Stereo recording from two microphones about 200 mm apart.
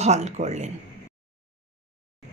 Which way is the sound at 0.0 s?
35° right (ahead or behind).